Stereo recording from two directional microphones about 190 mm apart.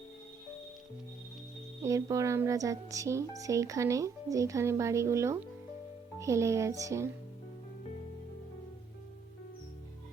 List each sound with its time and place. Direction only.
1.8 s speech: 15° right (ahead or behind)